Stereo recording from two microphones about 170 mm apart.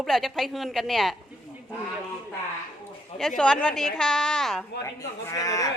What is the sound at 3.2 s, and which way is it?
A woman's voice, centre (ahead or behind).